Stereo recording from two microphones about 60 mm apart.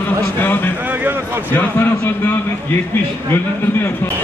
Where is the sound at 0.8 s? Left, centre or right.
Right.